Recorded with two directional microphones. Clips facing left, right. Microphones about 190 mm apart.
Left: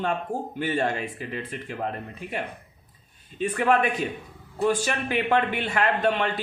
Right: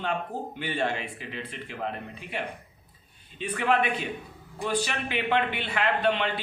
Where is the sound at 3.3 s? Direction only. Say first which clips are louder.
Left 3 dB; 45° left (ahead or behind).